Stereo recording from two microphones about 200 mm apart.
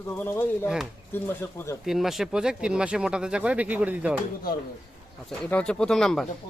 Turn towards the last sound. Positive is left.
turn(degrees=0)  # may be behind; listen again after turning